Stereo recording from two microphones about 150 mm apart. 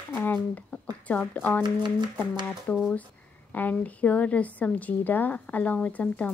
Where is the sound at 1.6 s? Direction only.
30° right (ahead or behind).